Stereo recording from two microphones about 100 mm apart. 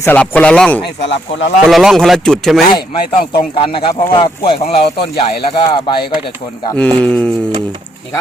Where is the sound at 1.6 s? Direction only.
Centre (ahead or behind).